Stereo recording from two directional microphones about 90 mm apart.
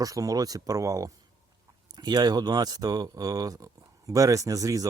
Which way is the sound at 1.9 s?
50° right (ahead or behind).